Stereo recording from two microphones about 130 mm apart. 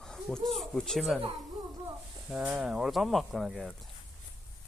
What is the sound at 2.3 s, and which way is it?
Speech, 10° right (ahead or behind).